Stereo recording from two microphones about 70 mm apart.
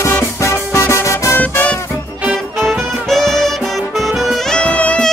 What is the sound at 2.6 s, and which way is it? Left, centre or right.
Music, centre.